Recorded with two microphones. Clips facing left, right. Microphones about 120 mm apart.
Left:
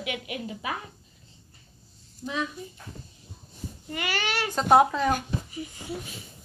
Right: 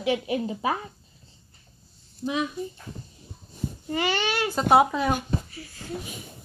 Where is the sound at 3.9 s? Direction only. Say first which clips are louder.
Right 4 dB; 25° right (ahead or behind).